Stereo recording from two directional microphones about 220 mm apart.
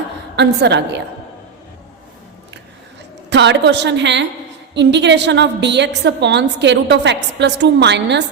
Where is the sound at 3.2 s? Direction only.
55° right (ahead or behind).